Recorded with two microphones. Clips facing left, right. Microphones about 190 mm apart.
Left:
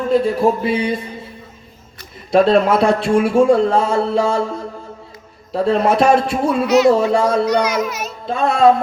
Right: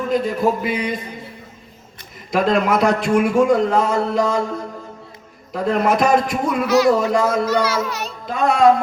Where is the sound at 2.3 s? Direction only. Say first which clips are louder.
Left 5 dB; 30° left (ahead or behind).